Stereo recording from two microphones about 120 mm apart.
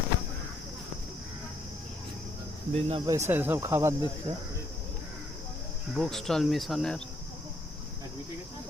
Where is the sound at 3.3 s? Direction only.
15° right (ahead or behind).